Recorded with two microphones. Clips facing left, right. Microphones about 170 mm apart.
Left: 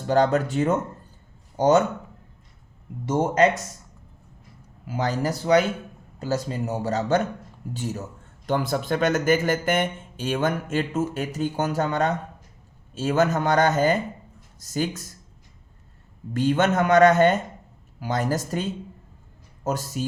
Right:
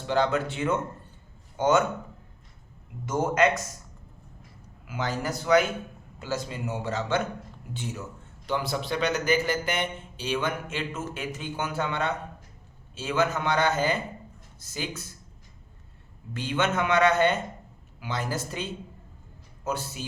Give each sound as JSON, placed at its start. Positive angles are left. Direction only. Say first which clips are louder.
{"t": 0.1, "sound": "speech", "louder": "left 5 dB", "side_deg": 40}
{"t": 3.1, "sound": "speech", "louder": "left 4 dB", "side_deg": 30}
{"t": 4.9, "sound": "speech", "louder": "left 5 dB", "side_deg": 35}
{"t": 16.3, "sound": "speech", "louder": "left 6 dB", "side_deg": 45}